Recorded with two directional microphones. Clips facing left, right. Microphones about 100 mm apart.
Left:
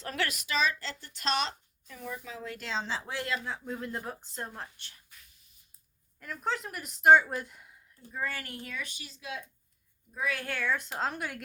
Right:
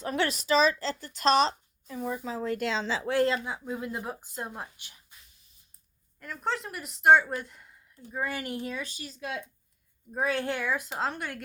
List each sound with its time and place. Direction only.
0.0 s speech: 20° right (ahead or behind)
2.6 s speech: 65° right (ahead or behind)
3.4 s speech: 15° right (ahead or behind)
6.1 s speech: centre (ahead or behind)
8.1 s speech: 15° right (ahead or behind); by 9.4 s 45° right (ahead or behind)
10.1 s speech: 35° right (ahead or behind); by 11.4 s centre (ahead or behind)